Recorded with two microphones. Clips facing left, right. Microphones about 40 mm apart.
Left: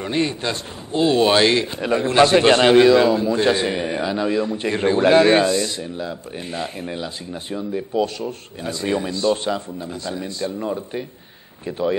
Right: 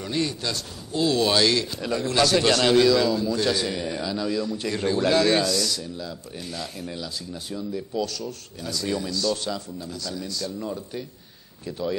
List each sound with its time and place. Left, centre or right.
0.0 s a man's voice: left